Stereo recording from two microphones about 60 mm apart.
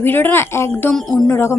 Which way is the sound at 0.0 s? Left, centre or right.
Left.